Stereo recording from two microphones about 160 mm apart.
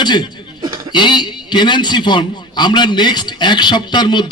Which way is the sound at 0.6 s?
30° right (ahead or behind).